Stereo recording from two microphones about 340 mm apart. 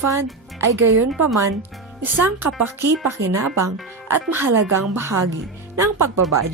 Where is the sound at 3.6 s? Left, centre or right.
Centre.